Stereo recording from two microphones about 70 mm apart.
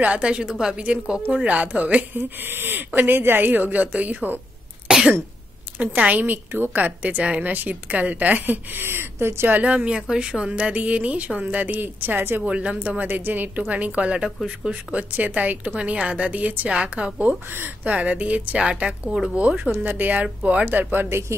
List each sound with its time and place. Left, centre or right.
0.0 s a woman's voice: centre
2.1 s a woman's voice: right
4.8 s cough: centre
5.8 s a woman's voice: centre
9.6 s a woman's voice: centre
12.4 s a woman's voice: centre